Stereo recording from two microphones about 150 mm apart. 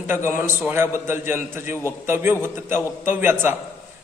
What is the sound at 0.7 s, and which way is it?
A man's voice, 15° right (ahead or behind).